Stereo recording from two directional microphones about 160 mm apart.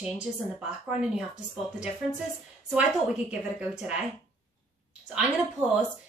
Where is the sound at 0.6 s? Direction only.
5° right (ahead or behind).